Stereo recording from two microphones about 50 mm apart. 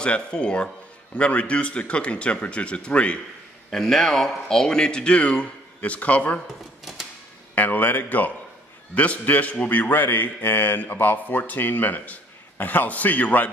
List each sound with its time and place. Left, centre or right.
0.0 s speech: left
3.7 s speech: centre; by 6.4 s left
6.8 s a sound: centre
7.5 s a man's voice: left